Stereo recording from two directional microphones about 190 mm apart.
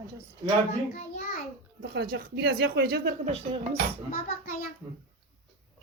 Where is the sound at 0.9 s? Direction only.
45° left (ahead or behind).